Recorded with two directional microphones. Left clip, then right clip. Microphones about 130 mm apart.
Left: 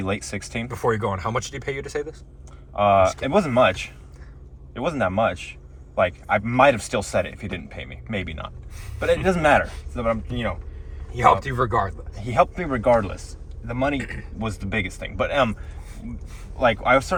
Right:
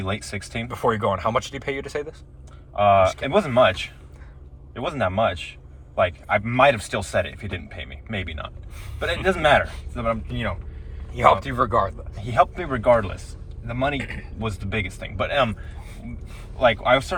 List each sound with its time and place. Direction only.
0.0 s a man's voice: 35° left (ahead or behind)
1.2 s speech: 15° right (ahead or behind)
2.7 s a man's voice: 40° left (ahead or behind)
11.1 s speech: 15° right (ahead or behind)
12.2 s a man's voice: 35° left (ahead or behind)
16.6 s a man's voice: 35° left (ahead or behind)